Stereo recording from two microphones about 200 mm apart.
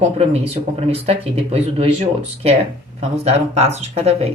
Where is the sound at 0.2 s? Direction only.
30° right (ahead or behind).